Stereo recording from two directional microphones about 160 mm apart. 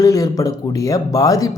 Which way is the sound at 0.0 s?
20° left (ahead or behind).